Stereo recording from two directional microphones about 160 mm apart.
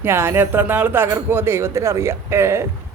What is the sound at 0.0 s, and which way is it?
Speech, 15° right (ahead or behind).